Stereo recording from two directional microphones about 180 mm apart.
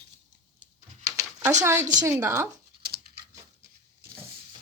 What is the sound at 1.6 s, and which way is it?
Speech, 15° right (ahead or behind).